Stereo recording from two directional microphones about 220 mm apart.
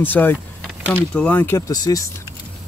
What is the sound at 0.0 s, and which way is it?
Speech, 10° left (ahead or behind).